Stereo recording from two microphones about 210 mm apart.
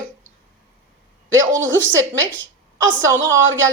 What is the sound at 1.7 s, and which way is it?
Speech, 65° right (ahead or behind).